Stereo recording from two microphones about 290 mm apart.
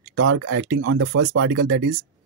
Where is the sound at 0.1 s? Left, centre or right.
Right.